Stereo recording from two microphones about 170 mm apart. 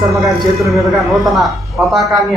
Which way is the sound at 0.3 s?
Centre (ahead or behind).